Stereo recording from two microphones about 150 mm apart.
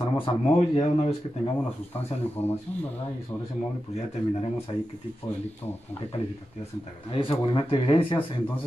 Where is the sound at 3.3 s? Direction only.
5° left (ahead or behind).